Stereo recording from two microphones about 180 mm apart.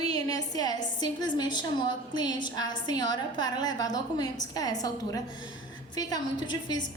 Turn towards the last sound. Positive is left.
turn(degrees=25)  # may be behind; listen again after turning